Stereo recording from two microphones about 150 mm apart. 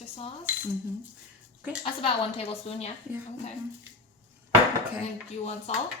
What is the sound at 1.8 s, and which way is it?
A woman's voice, 40° left (ahead or behind).